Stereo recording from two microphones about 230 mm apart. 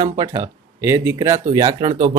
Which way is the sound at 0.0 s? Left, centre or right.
Centre.